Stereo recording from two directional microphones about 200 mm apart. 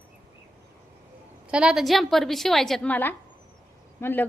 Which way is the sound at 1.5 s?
5° right (ahead or behind).